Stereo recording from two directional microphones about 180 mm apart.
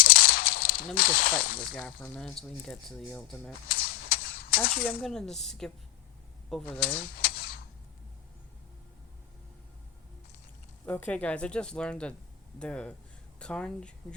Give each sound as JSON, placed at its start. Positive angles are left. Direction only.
{"t": 0.0, "sound": "a sound", "side_deg": 55}
{"t": 0.9, "sound": "speech", "side_deg": 55}
{"t": 1.7, "sound": "speech", "side_deg": 5}
{"t": 3.7, "sound": "a sound", "side_deg": 60}
{"t": 4.7, "sound": "speech", "side_deg": 55}
{"t": 4.9, "sound": "speech", "side_deg": 5}
{"t": 7.0, "sound": "typewriter", "side_deg": 60}
{"t": 10.8, "sound": "speech", "side_deg": 10}